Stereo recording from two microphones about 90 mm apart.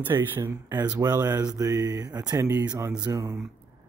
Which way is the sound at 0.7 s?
50° right (ahead or behind).